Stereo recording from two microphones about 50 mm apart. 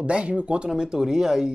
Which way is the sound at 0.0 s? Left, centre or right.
Right.